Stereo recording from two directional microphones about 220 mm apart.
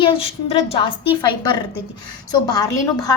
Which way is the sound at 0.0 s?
25° left (ahead or behind).